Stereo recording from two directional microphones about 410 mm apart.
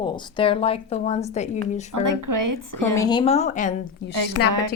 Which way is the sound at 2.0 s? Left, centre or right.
Right.